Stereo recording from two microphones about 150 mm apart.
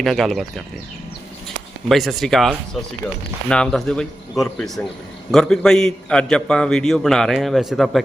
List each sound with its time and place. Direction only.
0.0 s a man's voice: centre (ahead or behind)
1.9 s a man's voice: centre (ahead or behind)